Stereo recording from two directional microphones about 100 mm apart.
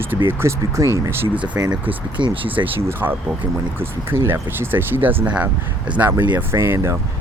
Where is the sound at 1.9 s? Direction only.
60° right (ahead or behind).